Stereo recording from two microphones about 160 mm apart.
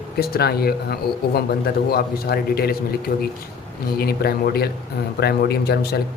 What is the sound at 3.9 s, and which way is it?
Speech, 75° left (ahead or behind).